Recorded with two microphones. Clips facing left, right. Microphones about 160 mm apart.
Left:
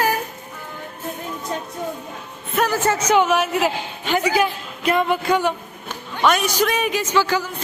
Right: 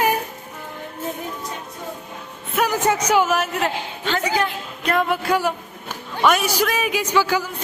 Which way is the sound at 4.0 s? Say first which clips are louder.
Left 3 dB; 15° left (ahead or behind).